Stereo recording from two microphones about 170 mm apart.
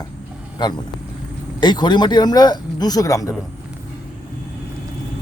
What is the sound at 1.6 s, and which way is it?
Speech, 25° left (ahead or behind).